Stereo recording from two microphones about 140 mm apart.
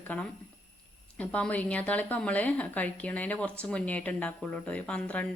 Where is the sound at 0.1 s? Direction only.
10° left (ahead or behind).